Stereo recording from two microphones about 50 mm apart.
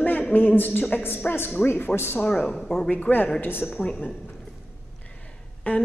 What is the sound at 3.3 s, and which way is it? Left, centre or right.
Speech, left.